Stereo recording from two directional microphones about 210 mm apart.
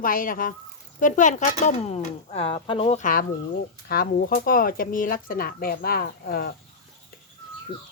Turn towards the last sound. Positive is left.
turn(degrees=45)  # may be behind; listen again after turning